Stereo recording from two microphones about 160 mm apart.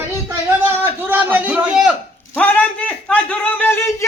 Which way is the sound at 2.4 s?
10° left (ahead or behind).